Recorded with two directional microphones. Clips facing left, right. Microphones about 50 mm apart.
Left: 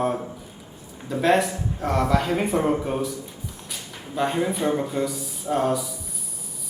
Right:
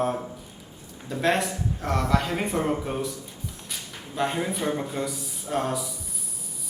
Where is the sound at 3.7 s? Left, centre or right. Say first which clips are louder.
Left 2 dB; centre.